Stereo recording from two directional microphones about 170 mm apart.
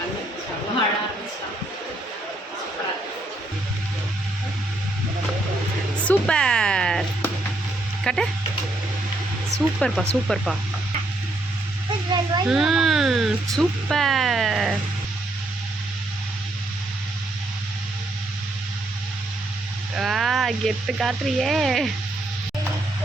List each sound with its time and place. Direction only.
6.1 s a sound: 5° left (ahead or behind)
8.0 s speech: 5° left (ahead or behind)
9.7 s speech: centre (ahead or behind)
12.1 s a sound: 25° right (ahead or behind)
12.5 s speech: centre (ahead or behind)
20.0 s speech: centre (ahead or behind)